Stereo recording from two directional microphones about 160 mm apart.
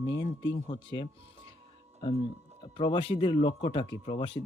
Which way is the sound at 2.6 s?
30° left (ahead or behind).